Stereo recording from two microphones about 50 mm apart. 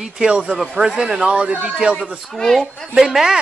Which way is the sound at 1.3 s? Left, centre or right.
Right.